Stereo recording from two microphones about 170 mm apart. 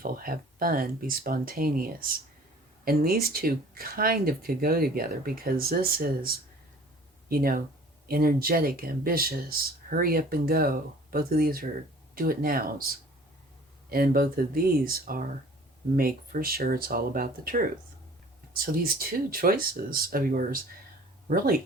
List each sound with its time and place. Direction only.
0.0 s speech: 55° right (ahead or behind)
13.9 s speech: 60° right (ahead or behind)